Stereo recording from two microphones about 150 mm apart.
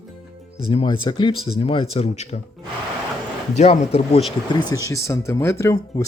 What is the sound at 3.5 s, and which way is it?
Speech, 45° left (ahead or behind).